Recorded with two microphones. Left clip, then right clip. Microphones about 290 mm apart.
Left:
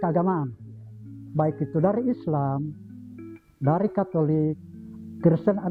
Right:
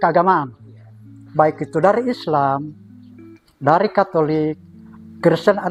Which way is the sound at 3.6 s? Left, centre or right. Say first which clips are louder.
Right 10 dB; centre.